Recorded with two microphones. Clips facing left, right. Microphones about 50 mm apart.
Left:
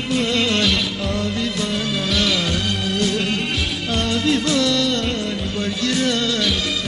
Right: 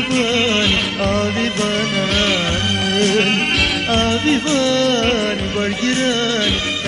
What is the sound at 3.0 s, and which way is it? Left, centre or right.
Music, right.